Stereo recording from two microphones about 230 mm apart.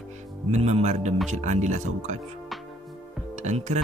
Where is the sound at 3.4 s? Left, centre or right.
Right.